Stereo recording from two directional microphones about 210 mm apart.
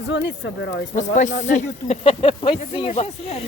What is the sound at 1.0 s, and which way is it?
Speech, 35° left (ahead or behind).